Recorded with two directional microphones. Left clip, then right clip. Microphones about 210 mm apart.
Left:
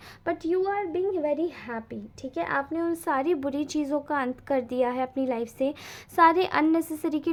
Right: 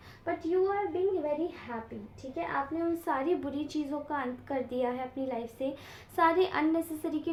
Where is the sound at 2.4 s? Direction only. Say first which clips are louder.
Left 5 dB; 50° left (ahead or behind).